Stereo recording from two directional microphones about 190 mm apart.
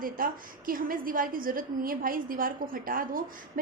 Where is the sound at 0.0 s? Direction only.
50° right (ahead or behind).